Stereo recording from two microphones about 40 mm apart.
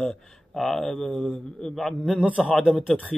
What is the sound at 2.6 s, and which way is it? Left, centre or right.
Speech, centre.